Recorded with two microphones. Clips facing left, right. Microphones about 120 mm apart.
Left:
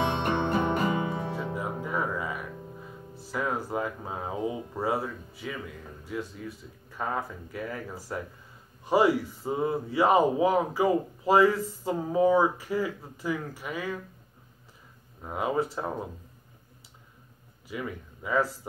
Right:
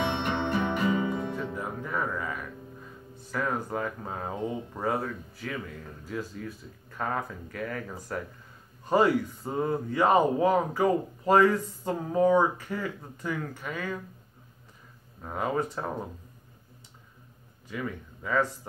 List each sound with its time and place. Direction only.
0.2 s music: 45° left (ahead or behind)
1.3 s music: 10° left (ahead or behind)
3.3 s speech: 5° left (ahead or behind)
15.2 s speech: 10° left (ahead or behind)
17.6 s speech: 10° left (ahead or behind)